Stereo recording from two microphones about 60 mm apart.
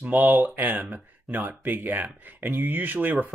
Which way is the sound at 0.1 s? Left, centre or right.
Right.